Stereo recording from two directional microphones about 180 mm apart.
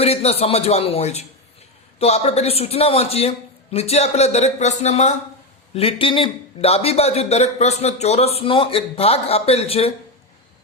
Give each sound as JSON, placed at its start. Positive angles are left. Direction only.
{"t": 0.0, "sound": "speech", "side_deg": 35}